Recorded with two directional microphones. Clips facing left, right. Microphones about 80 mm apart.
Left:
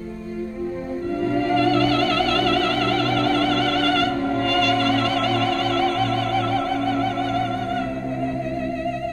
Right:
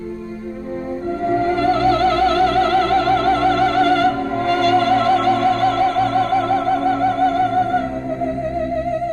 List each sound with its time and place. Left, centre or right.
1.7 s music: right